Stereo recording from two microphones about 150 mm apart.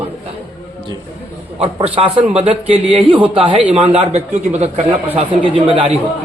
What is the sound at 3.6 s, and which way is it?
Speech, 10° right (ahead or behind).